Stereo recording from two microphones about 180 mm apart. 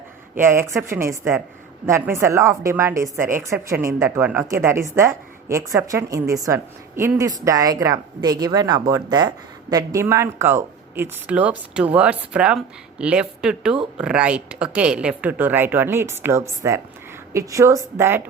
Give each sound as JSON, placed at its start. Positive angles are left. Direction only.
{"t": 0.3, "sound": "a woman's voice", "side_deg": -15}